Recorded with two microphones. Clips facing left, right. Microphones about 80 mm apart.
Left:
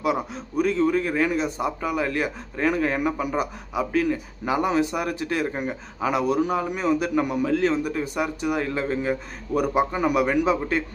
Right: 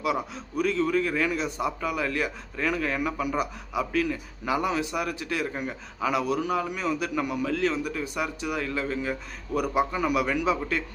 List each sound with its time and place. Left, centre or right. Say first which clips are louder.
0.3 s a man's voice: left 3 dB; left